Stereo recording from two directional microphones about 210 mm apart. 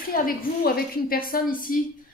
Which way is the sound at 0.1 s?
45° left (ahead or behind).